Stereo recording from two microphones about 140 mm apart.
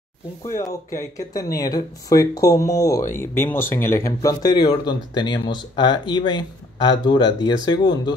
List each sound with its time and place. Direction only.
0.5 s speech: 20° left (ahead or behind)